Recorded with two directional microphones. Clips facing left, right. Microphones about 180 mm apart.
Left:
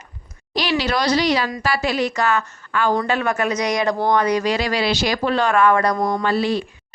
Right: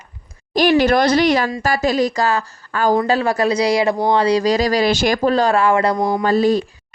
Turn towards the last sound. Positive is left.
turn(degrees=-45)  # may be behind; listen again after turning